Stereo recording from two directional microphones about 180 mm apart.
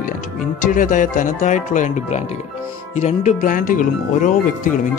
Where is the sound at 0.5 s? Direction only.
45° left (ahead or behind).